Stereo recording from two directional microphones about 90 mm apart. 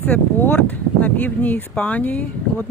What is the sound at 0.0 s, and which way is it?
Speech, 20° left (ahead or behind).